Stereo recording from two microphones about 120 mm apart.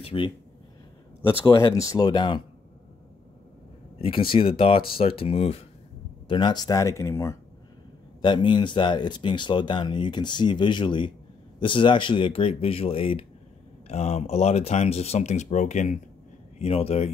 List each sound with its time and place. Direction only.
0.0 s speech: 45° left (ahead or behind)
1.7 s speech: 30° left (ahead or behind)
4.0 s speech: 50° left (ahead or behind)
6.2 s speech: 40° left (ahead or behind); by 7.3 s 25° left (ahead or behind)
8.2 s speech: 40° left (ahead or behind)
13.8 s speech: 65° left (ahead or behind); by 16.0 s 80° left
16.5 s speech: 55° left (ahead or behind)